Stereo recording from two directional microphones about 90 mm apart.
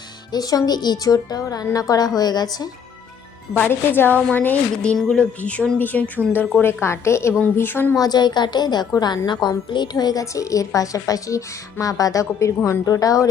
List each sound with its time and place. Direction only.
0.3 s a woman's voice: 45° left (ahead or behind)
3.7 s a woman's voice: 25° left (ahead or behind)
7.9 s a woman's voice: 50° left (ahead or behind)